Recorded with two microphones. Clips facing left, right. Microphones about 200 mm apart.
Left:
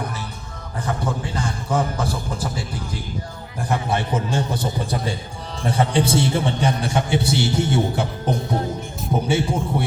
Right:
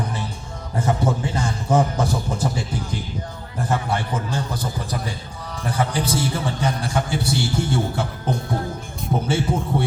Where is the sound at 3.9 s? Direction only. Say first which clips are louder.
Left 2 dB; 25° left (ahead or behind).